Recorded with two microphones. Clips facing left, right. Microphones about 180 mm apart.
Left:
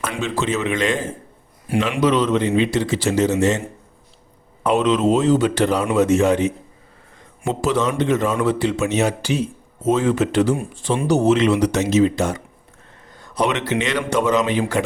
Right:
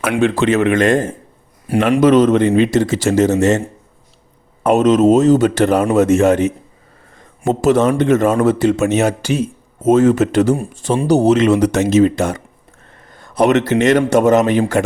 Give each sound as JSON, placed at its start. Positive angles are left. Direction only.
{"t": 0.0, "sound": "a man's voice", "side_deg": -60}
{"t": 4.6, "sound": "a man's voice", "side_deg": -45}